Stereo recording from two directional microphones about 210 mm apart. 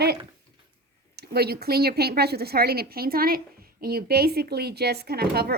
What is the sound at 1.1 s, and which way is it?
A woman's voice, 50° right (ahead or behind).